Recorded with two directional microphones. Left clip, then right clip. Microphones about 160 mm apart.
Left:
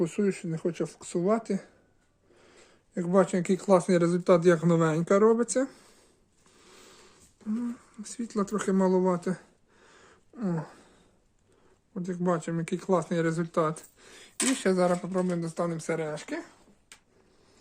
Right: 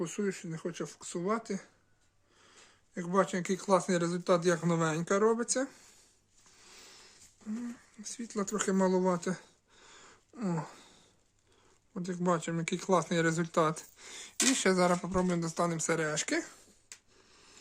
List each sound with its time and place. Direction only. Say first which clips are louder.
0.0 s speech: left 7 dB; 15° left (ahead or behind)
8.0 s speech: left 5 dB; 20° left (ahead or behind); by 9.4 s 5° right (ahead or behind)
9.8 s a sound: even; 5° right (ahead or behind)
11.9 s speech: left 2 dB; 10° right (ahead or behind); by 16.0 s 30° right (ahead or behind)
16.0 s speech: right 2 dB; 55° right (ahead or behind)